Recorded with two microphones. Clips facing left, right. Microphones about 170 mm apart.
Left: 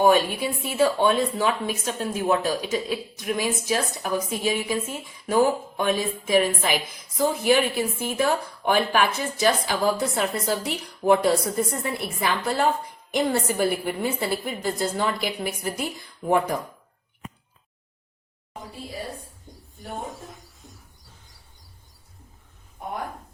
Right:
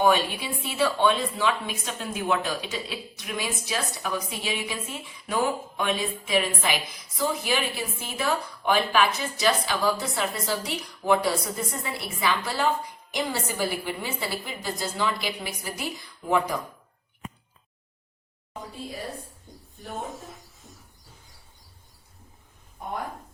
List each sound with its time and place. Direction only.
0.0 s speech: 45° left (ahead or behind)